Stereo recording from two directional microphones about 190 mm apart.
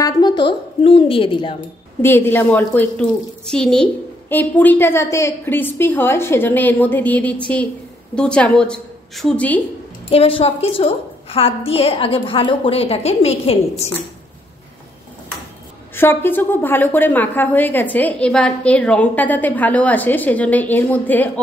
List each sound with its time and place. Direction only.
0.0 s a woman's voice: 20° left (ahead or behind)
2.0 s a woman's voice: 10° left (ahead or behind)
10.0 s a woman's voice: 30° left (ahead or behind)
15.9 s a woman's voice: 10° left (ahead or behind)